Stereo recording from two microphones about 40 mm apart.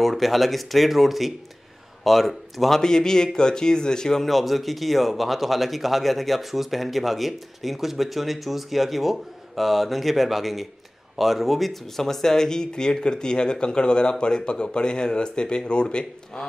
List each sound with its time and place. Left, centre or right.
0.0 s speech: centre
2.8 s speech: centre
4.3 s speech: centre; by 16.4 s left